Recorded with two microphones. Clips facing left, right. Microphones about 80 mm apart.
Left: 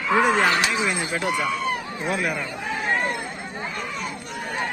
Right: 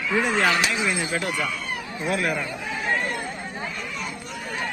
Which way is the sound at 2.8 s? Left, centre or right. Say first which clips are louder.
Left 1 dB; left.